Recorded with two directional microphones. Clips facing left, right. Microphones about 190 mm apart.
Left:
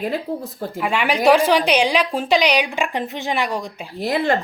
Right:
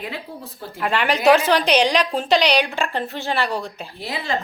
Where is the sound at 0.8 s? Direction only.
10° left (ahead or behind).